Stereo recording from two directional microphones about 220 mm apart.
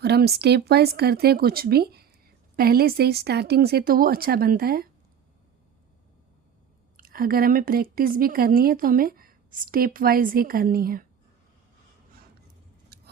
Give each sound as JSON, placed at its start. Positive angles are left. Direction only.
{"t": 0.0, "sound": "speech", "side_deg": -45}
{"t": 6.9, "sound": "a woman's voice", "side_deg": -40}
{"t": 12.9, "sound": "a sound", "side_deg": -45}